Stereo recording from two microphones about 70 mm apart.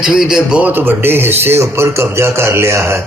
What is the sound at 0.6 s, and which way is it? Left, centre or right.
A man's voice, right.